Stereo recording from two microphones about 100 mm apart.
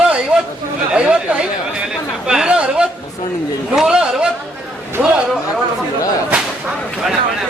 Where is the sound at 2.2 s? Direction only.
5° right (ahead or behind).